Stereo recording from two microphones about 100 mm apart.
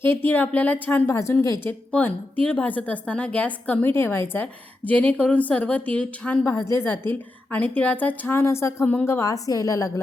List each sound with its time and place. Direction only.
0.0 s speech: 20° left (ahead or behind)
1.9 s a woman's voice: 15° left (ahead or behind); by 10.0 s 35° left (ahead or behind)